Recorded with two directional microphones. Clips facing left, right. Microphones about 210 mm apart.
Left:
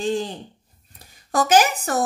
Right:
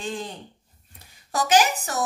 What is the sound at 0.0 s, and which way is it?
Speech, 30° left (ahead or behind).